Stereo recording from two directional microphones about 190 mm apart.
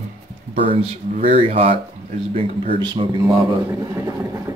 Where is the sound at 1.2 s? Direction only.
30° right (ahead or behind).